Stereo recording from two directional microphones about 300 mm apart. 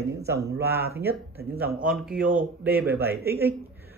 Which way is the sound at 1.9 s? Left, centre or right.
Centre.